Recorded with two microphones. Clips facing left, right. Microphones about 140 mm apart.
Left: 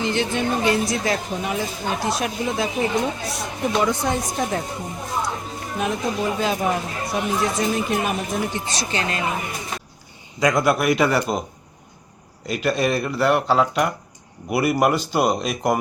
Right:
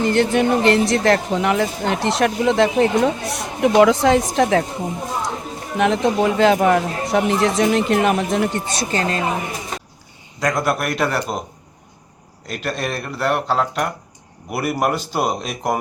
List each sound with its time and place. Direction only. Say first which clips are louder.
0.0 s speech: right 6 dB; 55° right (ahead or behind); by 4.6 s 90° right
5.7 s speech: right 7 dB; 85° right; by 9.3 s 35° right (ahead or behind)
10.4 s speech: left 2 dB; centre (ahead or behind)
12.5 s speech: left 4 dB; centre (ahead or behind)